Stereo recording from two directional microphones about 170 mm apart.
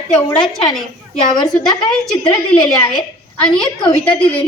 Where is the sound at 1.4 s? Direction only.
25° left (ahead or behind).